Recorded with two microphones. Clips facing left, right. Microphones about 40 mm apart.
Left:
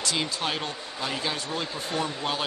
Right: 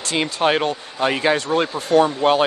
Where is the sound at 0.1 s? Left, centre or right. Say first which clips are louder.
Right 12 dB; right.